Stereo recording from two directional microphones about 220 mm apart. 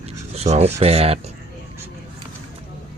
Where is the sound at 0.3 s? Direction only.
30° right (ahead or behind).